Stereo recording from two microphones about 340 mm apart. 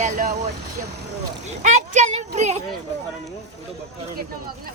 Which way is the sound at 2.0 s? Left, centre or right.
Centre.